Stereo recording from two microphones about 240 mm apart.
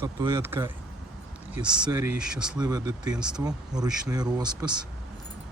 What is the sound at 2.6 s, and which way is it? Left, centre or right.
Speech, centre.